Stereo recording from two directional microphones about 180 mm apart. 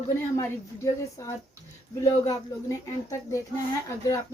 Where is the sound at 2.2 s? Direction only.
20° left (ahead or behind).